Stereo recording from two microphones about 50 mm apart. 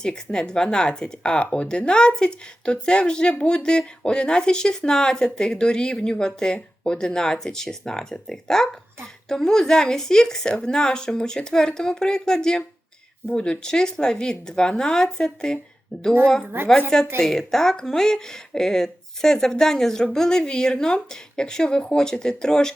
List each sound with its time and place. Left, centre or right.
0.0 s speech: centre
17.2 s speech: centre